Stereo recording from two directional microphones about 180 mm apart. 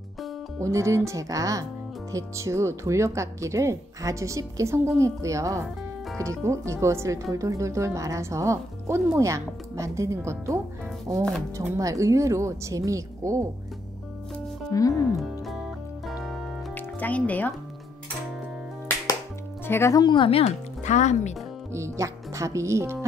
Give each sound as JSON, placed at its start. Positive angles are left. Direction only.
{"t": 0.6, "sound": "speech", "side_deg": -15}
{"t": 14.7, "sound": "speech", "side_deg": 20}
{"t": 16.1, "sound": "music", "side_deg": 0}
{"t": 16.7, "sound": "speech", "side_deg": 10}
{"t": 19.6, "sound": "speech", "side_deg": 15}
{"t": 21.7, "sound": "speech", "side_deg": -15}